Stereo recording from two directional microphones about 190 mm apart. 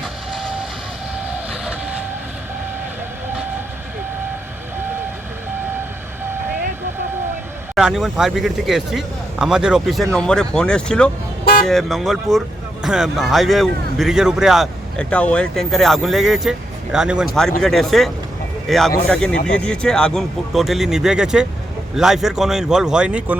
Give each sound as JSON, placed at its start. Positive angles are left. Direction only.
{"t": 0.0, "sound": "vehicle", "side_deg": 0}
{"t": 7.8, "sound": "speech", "side_deg": 0}